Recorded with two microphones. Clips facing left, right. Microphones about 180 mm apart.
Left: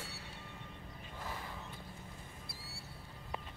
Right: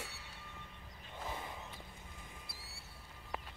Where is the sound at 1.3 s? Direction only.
20° right (ahead or behind).